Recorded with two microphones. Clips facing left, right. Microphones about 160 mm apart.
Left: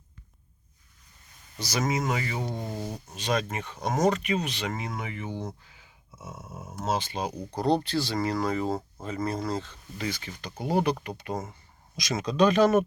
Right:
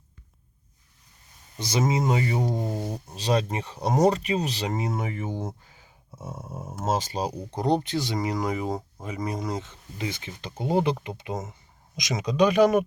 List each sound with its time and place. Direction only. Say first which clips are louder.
1.5 s speech: right 3 dB; 25° right (ahead or behind)
2.6 s speech: right 4 dB; 15° right (ahead or behind)
3.2 s speech: right 3 dB; 35° right (ahead or behind)
5.7 s a sound: right 4 dB; 40° right (ahead or behind)
6.7 s speech: right 2 dB; 45° right (ahead or behind)
7.5 s speech: even; 20° right (ahead or behind)